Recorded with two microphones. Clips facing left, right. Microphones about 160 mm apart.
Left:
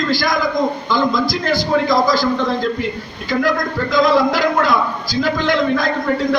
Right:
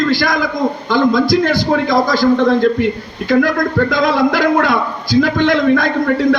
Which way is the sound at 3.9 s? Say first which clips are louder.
Even; 60° right (ahead or behind).